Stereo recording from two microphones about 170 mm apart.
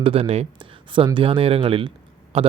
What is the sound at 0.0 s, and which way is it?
Speech, 35° right (ahead or behind).